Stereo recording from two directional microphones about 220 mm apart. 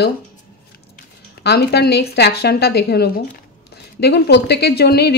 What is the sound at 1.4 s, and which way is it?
Speech, 45° left (ahead or behind).